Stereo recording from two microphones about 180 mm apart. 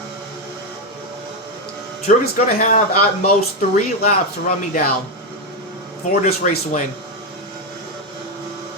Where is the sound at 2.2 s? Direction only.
45° left (ahead or behind).